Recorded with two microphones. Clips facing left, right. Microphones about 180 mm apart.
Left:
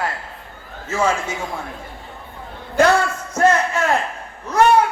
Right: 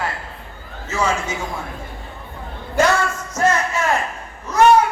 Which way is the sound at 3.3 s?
60° left (ahead or behind).